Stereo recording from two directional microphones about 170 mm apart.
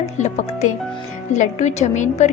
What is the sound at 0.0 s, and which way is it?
A woman's voice, 40° left (ahead or behind).